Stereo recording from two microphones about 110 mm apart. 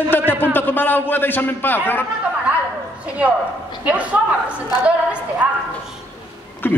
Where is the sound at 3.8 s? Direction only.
10° right (ahead or behind).